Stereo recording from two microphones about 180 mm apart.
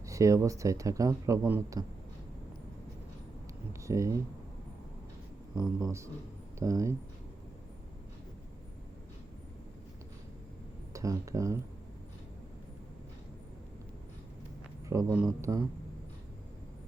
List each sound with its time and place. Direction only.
0.0 s speech: 15° right (ahead or behind)
3.7 s a sound: 15° right (ahead or behind)
5.5 s speech: 15° right (ahead or behind)
10.9 s speech: 15° right (ahead or behind)
14.8 s a man's voice: 15° right (ahead or behind)